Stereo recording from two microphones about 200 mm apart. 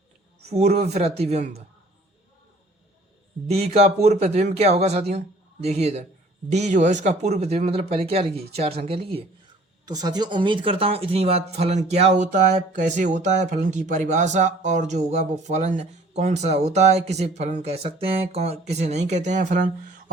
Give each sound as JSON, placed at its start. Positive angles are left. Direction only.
{"t": 0.4, "sound": "speech", "side_deg": -35}
{"t": 3.4, "sound": "speech", "side_deg": -30}